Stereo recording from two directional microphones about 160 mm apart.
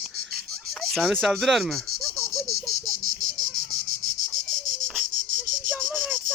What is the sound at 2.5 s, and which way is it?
Insect, 65° right (ahead or behind).